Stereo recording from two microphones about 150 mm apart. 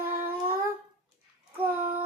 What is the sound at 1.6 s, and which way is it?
Child singing, 10° right (ahead or behind).